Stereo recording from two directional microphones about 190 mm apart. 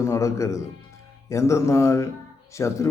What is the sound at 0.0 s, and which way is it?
Speech, 15° left (ahead or behind).